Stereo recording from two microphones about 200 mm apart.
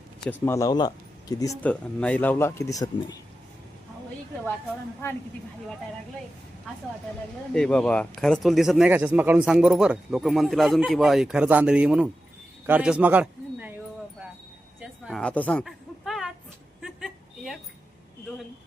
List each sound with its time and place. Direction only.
0.4 s speech: 15° left (ahead or behind)
1.6 s speech: 5° left (ahead or behind)
5.0 s speech: 10° left (ahead or behind)
7.5 s speech: 5° left (ahead or behind)
14.8 s a sound: centre (ahead or behind)